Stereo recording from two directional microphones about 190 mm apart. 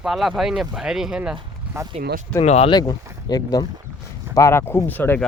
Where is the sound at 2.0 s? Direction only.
55° right (ahead or behind).